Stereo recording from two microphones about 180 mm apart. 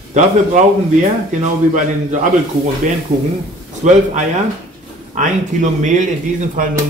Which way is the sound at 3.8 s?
45° right (ahead or behind).